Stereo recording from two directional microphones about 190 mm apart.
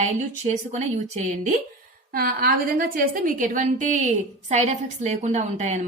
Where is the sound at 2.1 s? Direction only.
50° right (ahead or behind).